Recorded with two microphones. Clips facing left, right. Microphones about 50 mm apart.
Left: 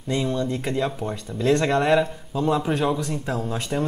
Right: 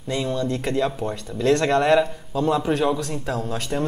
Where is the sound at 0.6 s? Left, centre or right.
Centre.